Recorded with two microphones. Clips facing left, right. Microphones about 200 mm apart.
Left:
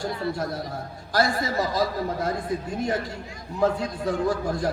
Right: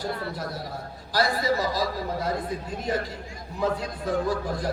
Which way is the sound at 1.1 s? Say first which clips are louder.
Left 1 dB; 50° left (ahead or behind).